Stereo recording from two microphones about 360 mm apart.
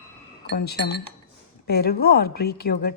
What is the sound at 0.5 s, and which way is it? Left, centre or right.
A woman's voice, left.